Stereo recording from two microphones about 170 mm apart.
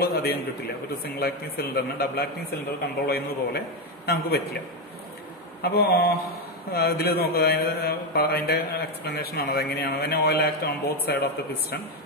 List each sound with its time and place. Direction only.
0.0 s a man's voice: 70° left (ahead or behind)
5.6 s a man's voice: 65° left (ahead or behind)